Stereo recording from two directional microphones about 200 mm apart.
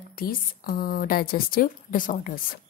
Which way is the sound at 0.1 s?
45° left (ahead or behind).